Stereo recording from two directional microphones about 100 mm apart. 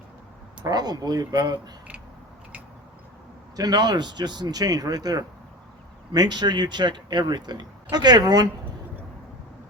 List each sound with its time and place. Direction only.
0.6 s speech: 40° right (ahead or behind)
3.5 s speech: 40° right (ahead or behind)